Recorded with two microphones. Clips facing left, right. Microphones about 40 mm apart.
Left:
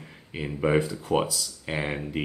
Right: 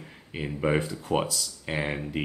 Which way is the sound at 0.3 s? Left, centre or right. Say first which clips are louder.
Left 2 dB; centre.